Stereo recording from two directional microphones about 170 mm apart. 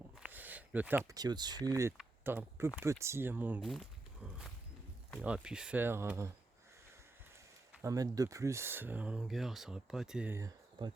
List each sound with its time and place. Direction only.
0.2 s a sound: 10° right (ahead or behind)
1.1 s speech: 25° right (ahead or behind)
3.6 s a sound: centre (ahead or behind)
5.2 s speech: 5° right (ahead or behind)
7.8 s speech: 20° right (ahead or behind)
10.8 s speech: 25° right (ahead or behind)